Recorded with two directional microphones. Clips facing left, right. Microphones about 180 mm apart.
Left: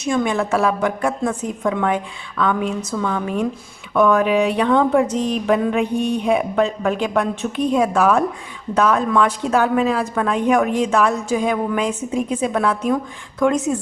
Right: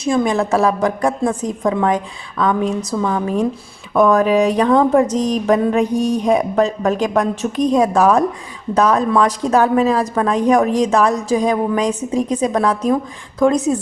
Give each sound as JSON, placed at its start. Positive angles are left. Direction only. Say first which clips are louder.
{"t": 0.0, "sound": "speech", "louder": "right 3 dB", "side_deg": -35}